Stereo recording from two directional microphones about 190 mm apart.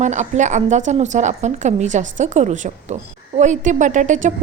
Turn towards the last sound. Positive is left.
turn(degrees=-40)  # may be behind; listen again after turning